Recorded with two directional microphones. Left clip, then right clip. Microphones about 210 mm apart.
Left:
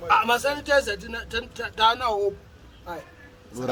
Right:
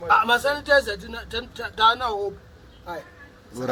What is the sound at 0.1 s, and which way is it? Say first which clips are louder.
A man's voice: right 2 dB; 10° left (ahead or behind).